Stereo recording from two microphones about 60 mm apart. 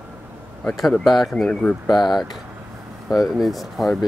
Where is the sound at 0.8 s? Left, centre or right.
Centre.